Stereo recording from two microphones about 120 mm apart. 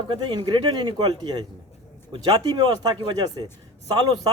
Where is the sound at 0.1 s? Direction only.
40° right (ahead or behind).